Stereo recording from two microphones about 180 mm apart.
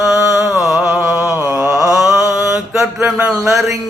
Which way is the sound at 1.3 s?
15° right (ahead or behind).